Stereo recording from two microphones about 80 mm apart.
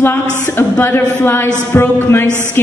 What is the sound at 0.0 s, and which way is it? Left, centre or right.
A woman's voice, left.